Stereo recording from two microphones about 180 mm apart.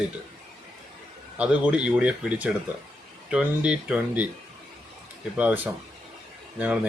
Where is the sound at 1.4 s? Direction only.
5° right (ahead or behind).